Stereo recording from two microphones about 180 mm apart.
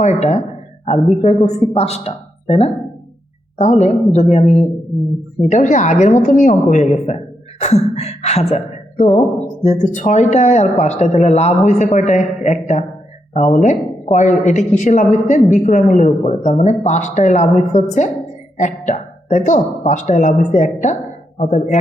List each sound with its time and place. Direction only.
0.0 s a woman's voice: 40° left (ahead or behind)
5.5 s a woman's voice: 45° left (ahead or behind)